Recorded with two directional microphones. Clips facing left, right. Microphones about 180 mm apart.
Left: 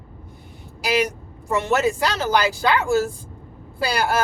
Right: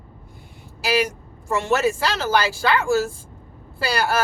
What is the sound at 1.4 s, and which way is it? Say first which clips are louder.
Speech: even; 15° left (ahead or behind).